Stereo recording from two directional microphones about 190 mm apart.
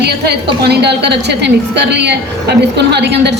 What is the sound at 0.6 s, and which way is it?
A woman's voice, 60° right (ahead or behind).